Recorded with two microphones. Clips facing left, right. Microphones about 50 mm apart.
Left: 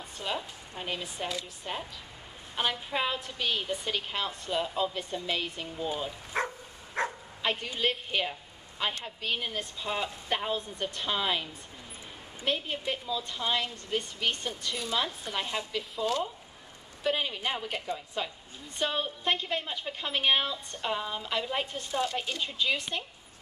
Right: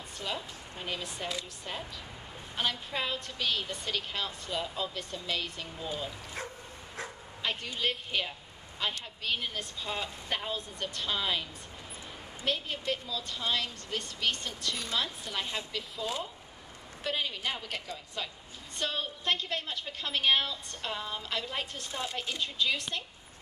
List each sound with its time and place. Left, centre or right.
0.2 s a woman's voice: centre
6.4 s dog: left
7.4 s a woman's voice: centre
12.4 s a woman's voice: centre
17.0 s a woman's voice: centre